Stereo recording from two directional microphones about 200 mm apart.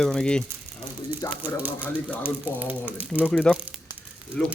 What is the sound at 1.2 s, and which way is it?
Speech, 15° left (ahead or behind).